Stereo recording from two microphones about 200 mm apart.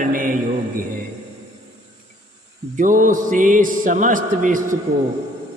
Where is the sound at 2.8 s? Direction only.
40° right (ahead or behind).